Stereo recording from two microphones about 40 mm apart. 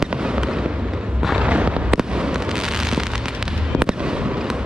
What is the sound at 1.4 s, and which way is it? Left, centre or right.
Fireworks, right.